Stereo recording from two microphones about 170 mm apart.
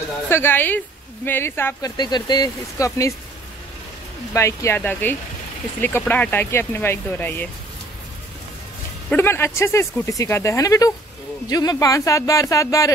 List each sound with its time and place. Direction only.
0.3 s speech: 15° left (ahead or behind)
2.0 s a man's voice: 25° left (ahead or behind)
4.3 s speech: 15° left (ahead or behind)
9.1 s a man's voice: 15° left (ahead or behind)